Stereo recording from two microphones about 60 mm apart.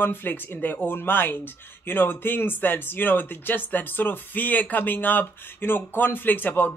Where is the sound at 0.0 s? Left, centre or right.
Left.